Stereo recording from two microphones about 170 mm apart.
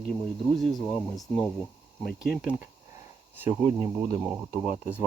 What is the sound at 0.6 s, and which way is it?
Speech, centre (ahead or behind).